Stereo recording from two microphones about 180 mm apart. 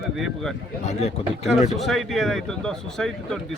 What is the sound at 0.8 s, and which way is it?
Speech, 35° left (ahead or behind).